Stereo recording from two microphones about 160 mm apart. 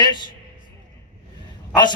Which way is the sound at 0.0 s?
25° left (ahead or behind).